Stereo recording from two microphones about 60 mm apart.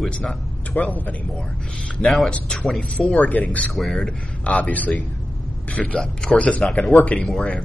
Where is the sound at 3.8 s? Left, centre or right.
Centre.